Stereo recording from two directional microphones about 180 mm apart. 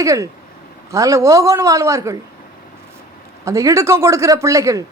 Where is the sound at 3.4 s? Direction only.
15° right (ahead or behind).